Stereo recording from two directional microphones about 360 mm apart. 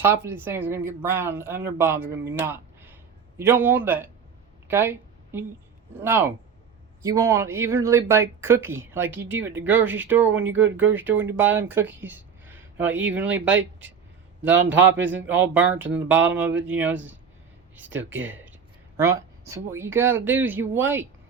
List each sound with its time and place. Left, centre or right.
0.0 s speech: centre
4.7 s a sound: centre
6.0 s speech: centre
12.9 s speech: right
13.1 s speech: centre
13.5 s speech: right
14.4 s speech: centre